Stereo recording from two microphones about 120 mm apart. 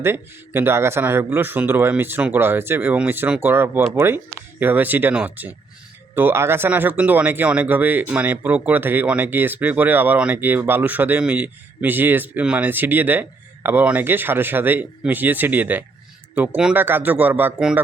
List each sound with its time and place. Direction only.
0.0 s speech: 20° right (ahead or behind)